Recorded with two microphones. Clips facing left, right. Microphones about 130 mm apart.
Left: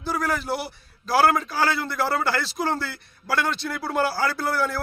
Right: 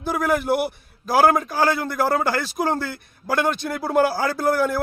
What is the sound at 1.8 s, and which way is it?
Speech, 45° right (ahead or behind).